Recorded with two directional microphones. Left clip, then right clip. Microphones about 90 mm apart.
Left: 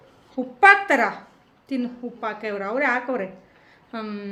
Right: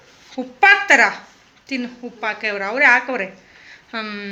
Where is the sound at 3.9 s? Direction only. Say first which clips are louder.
Right 6 dB; 20° left (ahead or behind).